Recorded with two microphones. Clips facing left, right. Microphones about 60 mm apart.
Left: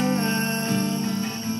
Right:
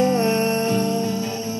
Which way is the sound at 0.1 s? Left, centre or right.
Right.